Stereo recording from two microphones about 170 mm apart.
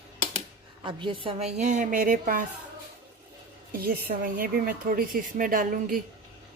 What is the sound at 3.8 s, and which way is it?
A woman's voice, 60° right (ahead or behind).